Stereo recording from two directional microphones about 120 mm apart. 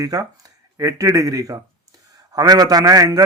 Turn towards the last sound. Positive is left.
turn(degrees=-30)  # may be behind; listen again after turning